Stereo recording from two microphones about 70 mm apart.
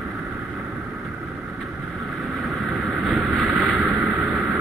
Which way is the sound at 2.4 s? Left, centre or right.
Centre.